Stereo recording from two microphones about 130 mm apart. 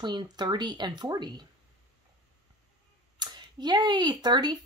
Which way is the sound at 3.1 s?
35° right (ahead or behind).